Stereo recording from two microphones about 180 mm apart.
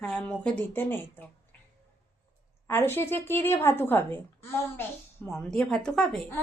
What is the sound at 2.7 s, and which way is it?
A child's voice, 10° left (ahead or behind).